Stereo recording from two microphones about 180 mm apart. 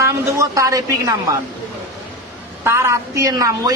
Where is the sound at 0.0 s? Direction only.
15° right (ahead or behind).